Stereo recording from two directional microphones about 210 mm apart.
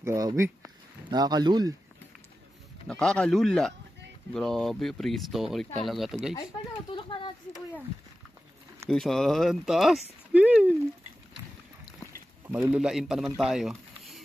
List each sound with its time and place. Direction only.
0.0 s speech: 15° right (ahead or behind)
2.9 s speech: 5° left (ahead or behind)
6.9 s a sound: 25° left (ahead or behind)
8.8 s speech: centre (ahead or behind)
12.4 s a man's voice: 5° right (ahead or behind)